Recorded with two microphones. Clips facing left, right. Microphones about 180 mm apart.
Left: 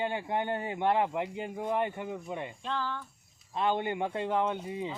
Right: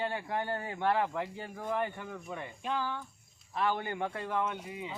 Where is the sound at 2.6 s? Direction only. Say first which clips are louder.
Right 1 dB; 15° right (ahead or behind).